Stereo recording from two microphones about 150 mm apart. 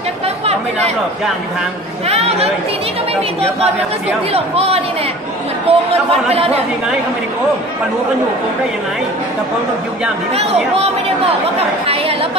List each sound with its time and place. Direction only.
0.5 s speech: 45° right (ahead or behind)
2.0 s speech: 45° right (ahead or behind)
4.3 s speech: 40° right (ahead or behind)
10.3 s speech: 45° right (ahead or behind)